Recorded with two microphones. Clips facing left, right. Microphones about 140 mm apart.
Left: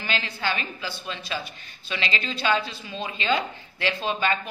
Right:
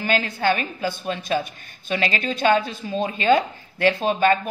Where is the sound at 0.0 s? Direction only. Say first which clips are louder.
Right 7 dB; 45° right (ahead or behind).